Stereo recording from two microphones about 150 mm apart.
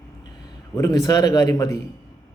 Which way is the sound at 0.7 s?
25° left (ahead or behind).